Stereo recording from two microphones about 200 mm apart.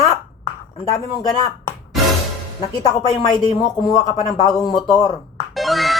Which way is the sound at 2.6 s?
20° left (ahead or behind).